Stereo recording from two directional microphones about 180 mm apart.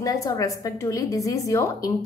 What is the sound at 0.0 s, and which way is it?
A woman's voice, 20° left (ahead or behind).